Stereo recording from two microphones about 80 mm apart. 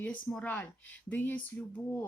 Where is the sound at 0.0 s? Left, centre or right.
Centre.